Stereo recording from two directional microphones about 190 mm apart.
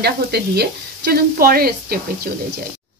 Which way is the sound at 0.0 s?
60° right (ahead or behind).